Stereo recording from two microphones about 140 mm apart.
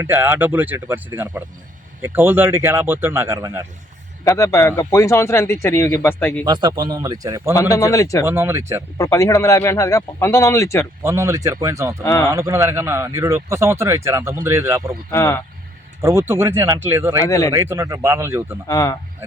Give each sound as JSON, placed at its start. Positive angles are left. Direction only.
{"t": 0.0, "sound": "speech", "side_deg": -15}
{"t": 4.2, "sound": "a man's voice", "side_deg": 20}
{"t": 6.4, "sound": "speech", "side_deg": -30}
{"t": 7.5, "sound": "a man's voice", "side_deg": 25}
{"t": 8.2, "sound": "speech", "side_deg": -15}
{"t": 9.0, "sound": "a man's voice", "side_deg": 20}
{"t": 11.0, "sound": "speech", "side_deg": -20}
{"t": 12.0, "sound": "a man's voice", "side_deg": 20}
{"t": 12.3, "sound": "speech", "side_deg": -20}
{"t": 15.1, "sound": "a man's voice", "side_deg": 20}
{"t": 16.0, "sound": "speech", "side_deg": -20}
{"t": 17.2, "sound": "a man's voice", "side_deg": 25}
{"t": 17.5, "sound": "speech", "side_deg": -20}
{"t": 18.7, "sound": "a man's voice", "side_deg": 25}